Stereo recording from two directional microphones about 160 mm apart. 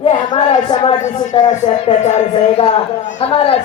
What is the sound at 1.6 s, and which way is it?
Music, 40° left (ahead or behind).